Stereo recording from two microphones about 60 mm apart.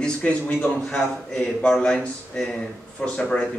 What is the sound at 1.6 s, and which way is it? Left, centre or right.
A man's voice, centre.